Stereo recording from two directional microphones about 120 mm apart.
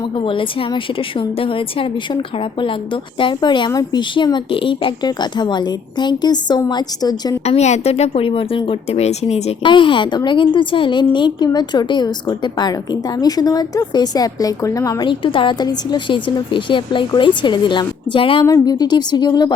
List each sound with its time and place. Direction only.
0.2 s a woman's voice: 45° left (ahead or behind)
7.4 s speech: 65° left (ahead or behind)
9.6 s a woman's voice: 45° left (ahead or behind)
15.0 s a woman's voice: 45° left (ahead or behind)
18.4 s a woman's voice: 30° left (ahead or behind)